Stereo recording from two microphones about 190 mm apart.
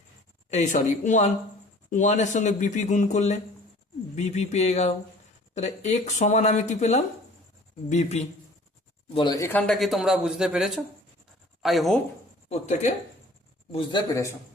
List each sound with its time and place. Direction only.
0.5 s speech: 40° left (ahead or behind)
9.1 s speech: 20° left (ahead or behind); by 11.9 s centre (ahead or behind)
12.5 s speech: 35° left (ahead or behind)